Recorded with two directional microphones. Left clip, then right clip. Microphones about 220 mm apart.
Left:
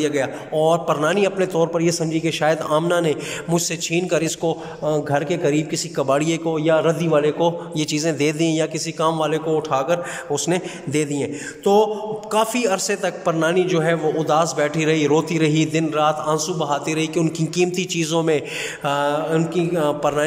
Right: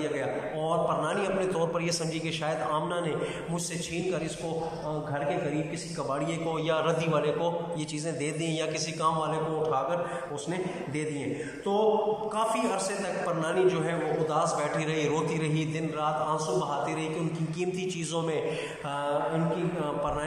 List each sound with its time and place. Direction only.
0.0 s a man's voice: 50° left (ahead or behind)
6.5 s a man's voice: 35° left (ahead or behind)
17.6 s a man's voice: 40° left (ahead or behind)